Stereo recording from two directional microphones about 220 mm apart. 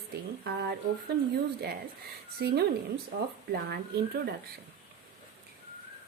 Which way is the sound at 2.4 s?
45° right (ahead or behind).